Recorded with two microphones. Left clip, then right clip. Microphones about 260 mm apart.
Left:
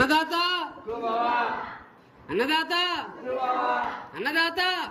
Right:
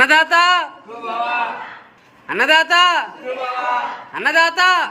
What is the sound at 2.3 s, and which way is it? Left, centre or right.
Speech, centre.